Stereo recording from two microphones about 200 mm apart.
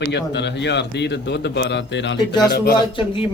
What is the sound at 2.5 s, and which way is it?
Speech, 50° left (ahead or behind).